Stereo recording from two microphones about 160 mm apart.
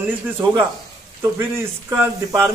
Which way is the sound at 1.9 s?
15° right (ahead or behind).